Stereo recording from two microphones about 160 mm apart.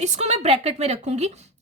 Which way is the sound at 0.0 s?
45° right (ahead or behind).